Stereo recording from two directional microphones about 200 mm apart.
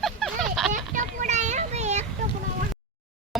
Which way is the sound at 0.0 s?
Centre (ahead or behind).